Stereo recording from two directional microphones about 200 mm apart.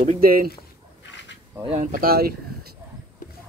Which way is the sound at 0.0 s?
45° right (ahead or behind).